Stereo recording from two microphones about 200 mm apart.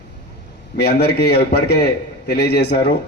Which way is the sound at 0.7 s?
55° left (ahead or behind).